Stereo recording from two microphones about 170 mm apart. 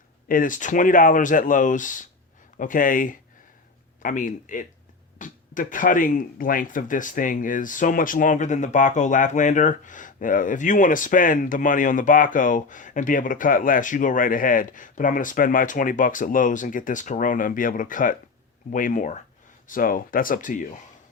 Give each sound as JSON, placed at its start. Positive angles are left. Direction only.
{"t": 0.3, "sound": "speech", "side_deg": 55}